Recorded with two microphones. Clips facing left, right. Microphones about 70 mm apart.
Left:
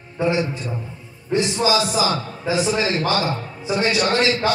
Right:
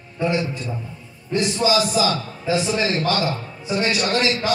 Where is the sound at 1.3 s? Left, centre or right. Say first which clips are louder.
Even; left.